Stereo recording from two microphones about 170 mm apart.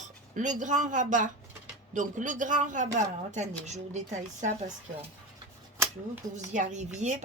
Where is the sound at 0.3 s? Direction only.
45° right (ahead or behind).